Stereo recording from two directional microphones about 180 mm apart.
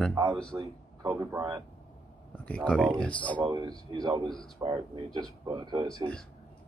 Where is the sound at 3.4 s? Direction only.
25° right (ahead or behind).